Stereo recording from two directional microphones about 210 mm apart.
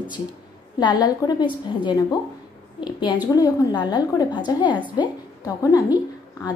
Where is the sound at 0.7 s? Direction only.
20° left (ahead or behind).